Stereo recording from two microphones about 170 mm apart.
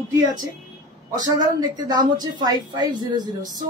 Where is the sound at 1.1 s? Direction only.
20° right (ahead or behind).